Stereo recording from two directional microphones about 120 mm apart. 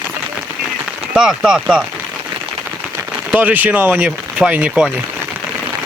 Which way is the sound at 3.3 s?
15° right (ahead or behind).